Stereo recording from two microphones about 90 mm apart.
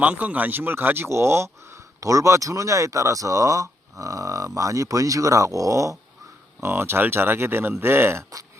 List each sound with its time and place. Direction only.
0.0 s speech: 15° right (ahead or behind); by 6.0 s 40° right (ahead or behind)
6.6 s speech: 25° right (ahead or behind)